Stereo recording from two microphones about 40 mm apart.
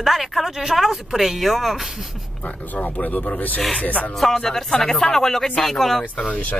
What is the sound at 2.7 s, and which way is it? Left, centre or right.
Speech, left.